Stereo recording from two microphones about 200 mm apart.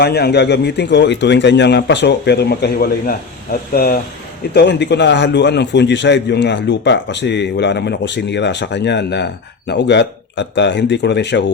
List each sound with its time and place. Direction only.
0.0 s a man's voice: 55° left (ahead or behind)
4.5 s a man's voice: 60° left (ahead or behind)